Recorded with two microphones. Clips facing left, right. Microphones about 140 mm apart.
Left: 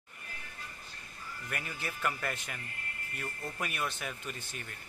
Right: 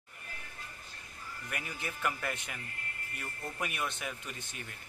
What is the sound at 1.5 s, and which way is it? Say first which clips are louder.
Speech: left 1 dB; 15° right (ahead or behind).